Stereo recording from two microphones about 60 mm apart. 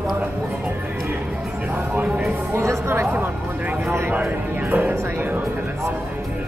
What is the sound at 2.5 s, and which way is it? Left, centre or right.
Speech, right.